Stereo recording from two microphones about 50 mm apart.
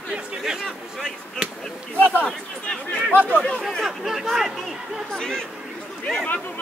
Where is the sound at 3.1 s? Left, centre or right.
Left.